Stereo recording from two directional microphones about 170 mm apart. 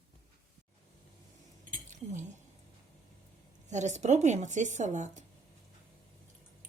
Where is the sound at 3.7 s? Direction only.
45° right (ahead or behind).